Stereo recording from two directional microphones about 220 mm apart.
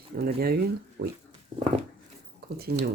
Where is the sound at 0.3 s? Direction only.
45° right (ahead or behind).